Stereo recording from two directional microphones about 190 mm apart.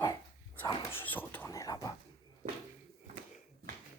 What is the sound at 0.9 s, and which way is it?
Speech, 10° left (ahead or behind).